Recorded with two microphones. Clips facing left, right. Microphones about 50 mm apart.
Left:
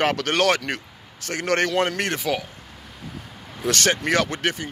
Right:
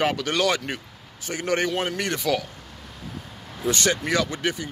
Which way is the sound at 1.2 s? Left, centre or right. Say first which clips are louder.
Left 2 dB; left.